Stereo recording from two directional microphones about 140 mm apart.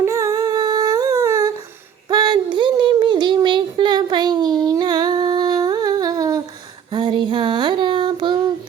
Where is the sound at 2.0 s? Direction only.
30° right (ahead or behind).